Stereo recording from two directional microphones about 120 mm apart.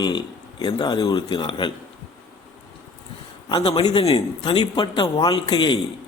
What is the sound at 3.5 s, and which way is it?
A man's voice, 40° left (ahead or behind).